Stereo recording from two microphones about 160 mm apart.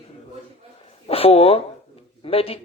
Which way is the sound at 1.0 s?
35° left (ahead or behind).